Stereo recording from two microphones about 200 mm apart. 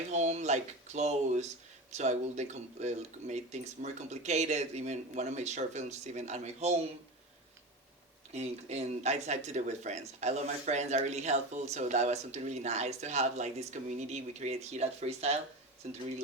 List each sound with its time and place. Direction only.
0.1 s speech: 35° right (ahead or behind)
8.3 s speech: 35° right (ahead or behind)